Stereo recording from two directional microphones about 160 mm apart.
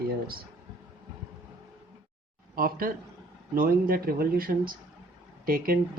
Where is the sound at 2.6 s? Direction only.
65° right (ahead or behind).